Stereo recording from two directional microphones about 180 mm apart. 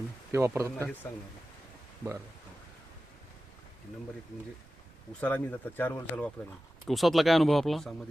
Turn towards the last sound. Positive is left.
turn(degrees=0)  # may be behind; listen again after turning